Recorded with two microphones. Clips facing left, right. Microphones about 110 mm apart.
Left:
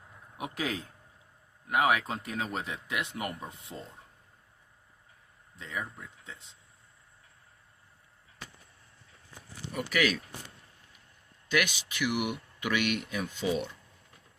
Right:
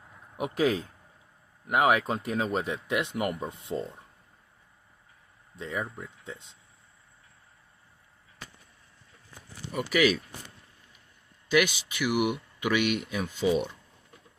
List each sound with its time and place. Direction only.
0.3 s speech: 20° right (ahead or behind)
5.5 s speech: 30° right (ahead or behind)
9.7 s speech: 10° right (ahead or behind)
11.5 s speech: 10° right (ahead or behind)